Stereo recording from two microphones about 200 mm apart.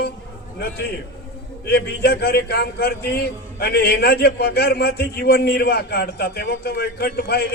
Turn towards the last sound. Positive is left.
turn(degrees=50)  # may be behind; listen again after turning